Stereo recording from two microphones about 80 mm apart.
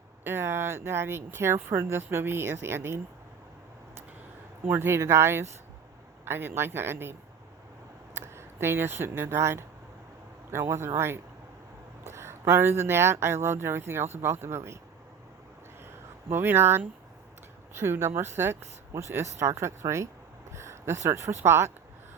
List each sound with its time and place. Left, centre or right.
0.3 s speech: right
4.6 s speech: right
16.3 s speech: right